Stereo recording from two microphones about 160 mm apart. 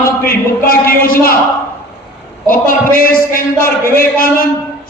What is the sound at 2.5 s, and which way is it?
A man's voice, 60° left (ahead or behind).